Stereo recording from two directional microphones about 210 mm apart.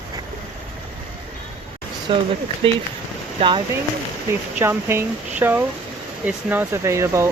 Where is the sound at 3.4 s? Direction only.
20° right (ahead or behind).